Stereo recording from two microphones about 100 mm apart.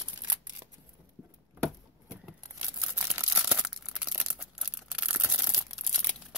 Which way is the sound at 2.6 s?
15° right (ahead or behind).